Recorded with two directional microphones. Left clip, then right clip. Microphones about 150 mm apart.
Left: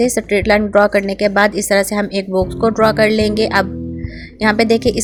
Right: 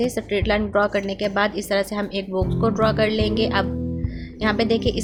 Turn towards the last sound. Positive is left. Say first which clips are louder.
# left 7 dB
turn(degrees=55)  # may be behind; listen again after turning